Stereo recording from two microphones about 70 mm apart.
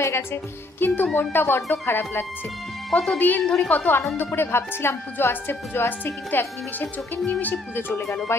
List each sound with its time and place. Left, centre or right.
0.0 s a woman's voice: left
3.4 s a woman's voice: centre
3.7 s a woman's voice: left
8.3 s speech: left